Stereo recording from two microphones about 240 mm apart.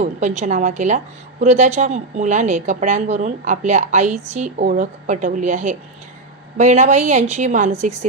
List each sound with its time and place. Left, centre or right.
0.0 s a woman's voice: right